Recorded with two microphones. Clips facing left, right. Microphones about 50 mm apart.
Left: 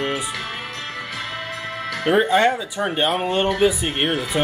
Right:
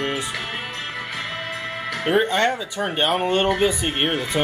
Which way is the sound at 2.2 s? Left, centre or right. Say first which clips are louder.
Left 4 dB; centre.